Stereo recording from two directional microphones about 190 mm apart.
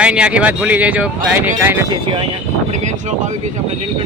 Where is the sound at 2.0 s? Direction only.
25° right (ahead or behind).